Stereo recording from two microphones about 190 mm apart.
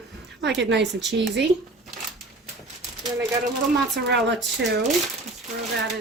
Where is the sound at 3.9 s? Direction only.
65° right (ahead or behind).